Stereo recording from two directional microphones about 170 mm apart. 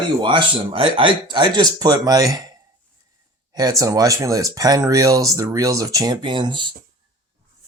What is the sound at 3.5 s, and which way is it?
Speech, 20° right (ahead or behind).